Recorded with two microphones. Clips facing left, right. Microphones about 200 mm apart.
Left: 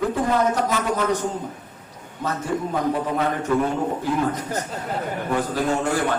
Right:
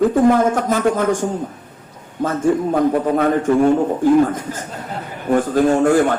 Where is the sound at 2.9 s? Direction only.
50° right (ahead or behind).